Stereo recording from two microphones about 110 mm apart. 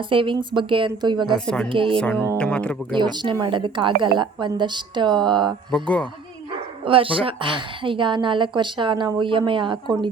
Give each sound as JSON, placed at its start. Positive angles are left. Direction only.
{"t": 0.0, "sound": "a woman's voice", "side_deg": -50}
{"t": 1.9, "sound": "speech", "side_deg": 5}
{"t": 3.0, "sound": "a woman's voice", "side_deg": -40}
{"t": 5.7, "sound": "speech", "side_deg": 10}
{"t": 6.8, "sound": "a woman's voice", "side_deg": -55}